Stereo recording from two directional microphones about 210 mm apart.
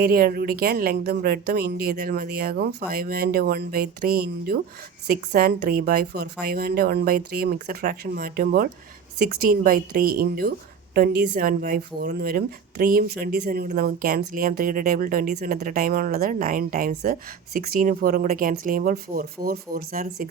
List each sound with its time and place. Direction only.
0.0 s speech: 45° right (ahead or behind)